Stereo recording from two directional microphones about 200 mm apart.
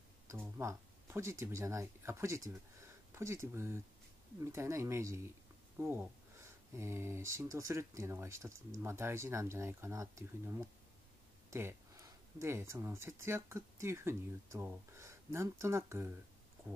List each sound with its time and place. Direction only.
0.3 s speech: 15° right (ahead or behind)